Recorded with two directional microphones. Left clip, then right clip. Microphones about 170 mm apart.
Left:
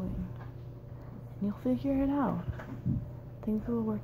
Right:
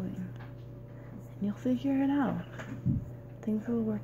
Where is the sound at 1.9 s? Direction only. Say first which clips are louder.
Right 1 dB; 20° right (ahead or behind).